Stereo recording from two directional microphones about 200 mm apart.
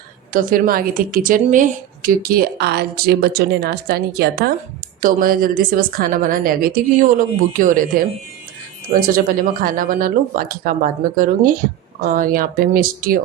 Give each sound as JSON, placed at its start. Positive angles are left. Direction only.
{"t": 0.3, "sound": "a woman's voice", "side_deg": -45}